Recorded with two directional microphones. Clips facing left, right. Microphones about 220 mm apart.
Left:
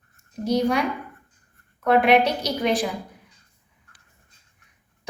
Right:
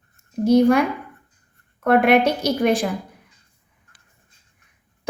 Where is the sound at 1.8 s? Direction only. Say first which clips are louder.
Right 2 dB; 50° right (ahead or behind).